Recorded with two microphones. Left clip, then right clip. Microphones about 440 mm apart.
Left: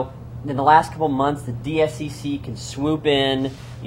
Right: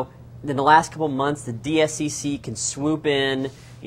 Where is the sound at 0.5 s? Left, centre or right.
Right.